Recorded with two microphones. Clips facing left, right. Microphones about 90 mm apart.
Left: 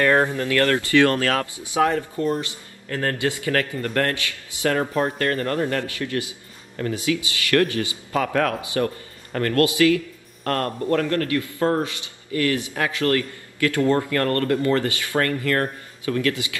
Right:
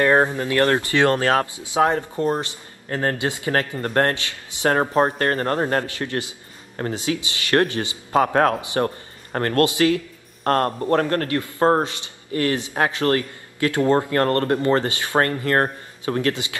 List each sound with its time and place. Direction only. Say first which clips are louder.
0.0 s a man's voice: right 1 dB; 20° right (ahead or behind)
4.7 s speech: right 6 dB; 40° right (ahead or behind)
6.9 s a man's voice: left 1 dB; 25° right (ahead or behind)
11.8 s a man's voice: right 2 dB; 25° right (ahead or behind)